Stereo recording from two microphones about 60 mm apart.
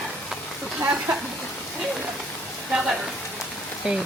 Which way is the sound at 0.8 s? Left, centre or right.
Right.